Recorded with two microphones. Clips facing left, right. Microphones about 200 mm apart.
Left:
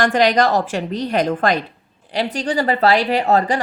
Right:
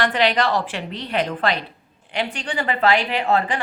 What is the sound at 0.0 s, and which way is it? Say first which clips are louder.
A woman's voice: left 4 dB; 45° left (ahead or behind).